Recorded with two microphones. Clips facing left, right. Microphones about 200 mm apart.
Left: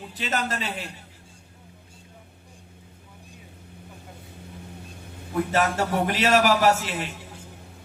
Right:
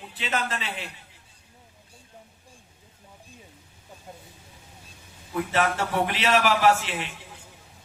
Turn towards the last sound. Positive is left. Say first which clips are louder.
# even
turn(degrees=40)  # may be behind; listen again after turning